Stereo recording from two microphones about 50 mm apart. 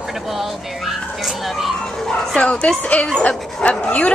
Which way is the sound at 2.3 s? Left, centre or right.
Left.